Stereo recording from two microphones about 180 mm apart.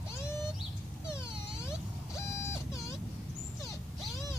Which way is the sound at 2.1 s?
15° left (ahead or behind).